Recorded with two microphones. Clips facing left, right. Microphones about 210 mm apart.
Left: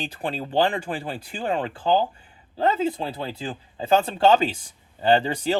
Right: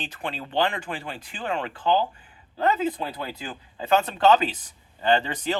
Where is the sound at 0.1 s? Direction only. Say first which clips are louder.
Left 4 dB; 35° left (ahead or behind).